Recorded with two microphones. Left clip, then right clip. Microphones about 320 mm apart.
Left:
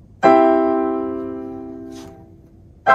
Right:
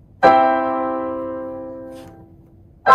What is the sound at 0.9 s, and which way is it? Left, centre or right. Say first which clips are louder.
Music: even; centre.